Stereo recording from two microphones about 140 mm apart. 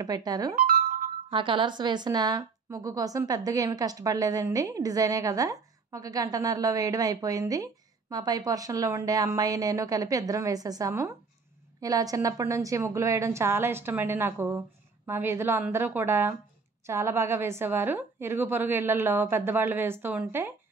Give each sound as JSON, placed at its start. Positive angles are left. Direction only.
{"t": 0.0, "sound": "a woman's voice", "side_deg": -30}